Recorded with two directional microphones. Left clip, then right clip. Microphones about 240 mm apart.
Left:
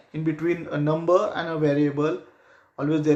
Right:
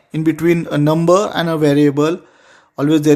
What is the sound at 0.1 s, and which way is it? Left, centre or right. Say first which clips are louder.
Speech: right 10 dB; right.